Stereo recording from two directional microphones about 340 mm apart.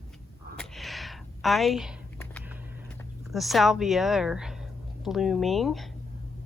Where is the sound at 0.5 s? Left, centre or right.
Centre.